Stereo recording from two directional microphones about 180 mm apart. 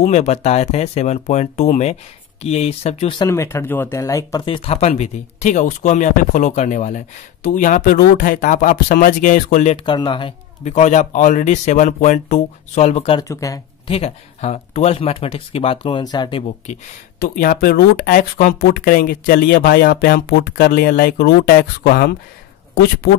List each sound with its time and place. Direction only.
0.0 s speech: 40° left (ahead or behind)
3.3 s speech: 15° left (ahead or behind)
4.6 s speech: 35° left (ahead or behind)
9.8 s speech: 25° left (ahead or behind)
10.6 s speech: 40° left (ahead or behind)
13.2 s speech: 20° left (ahead or behind)
13.8 s speech: 35° left (ahead or behind)
17.2 s speech: 55° left (ahead or behind)